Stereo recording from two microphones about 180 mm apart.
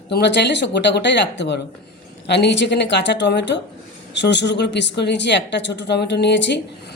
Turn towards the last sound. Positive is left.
turn(degrees=75)  # may be behind; listen again after turning